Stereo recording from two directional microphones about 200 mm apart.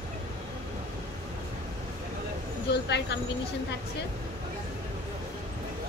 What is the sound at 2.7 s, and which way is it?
Speech, 55° left (ahead or behind).